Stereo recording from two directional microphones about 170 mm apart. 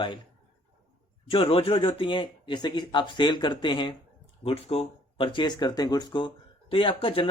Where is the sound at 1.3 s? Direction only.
30° left (ahead or behind).